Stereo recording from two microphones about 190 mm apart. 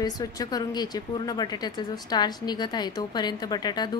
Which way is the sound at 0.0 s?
20° left (ahead or behind).